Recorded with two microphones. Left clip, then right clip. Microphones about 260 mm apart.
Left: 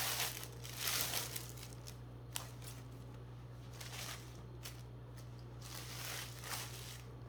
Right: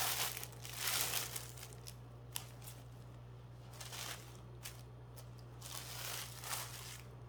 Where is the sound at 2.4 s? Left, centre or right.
Centre.